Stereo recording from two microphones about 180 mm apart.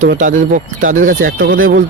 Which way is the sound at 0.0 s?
45° right (ahead or behind).